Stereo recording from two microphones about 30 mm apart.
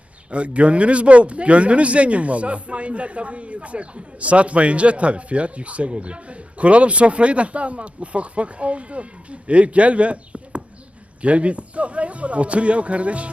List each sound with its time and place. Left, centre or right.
0.3 s speech: right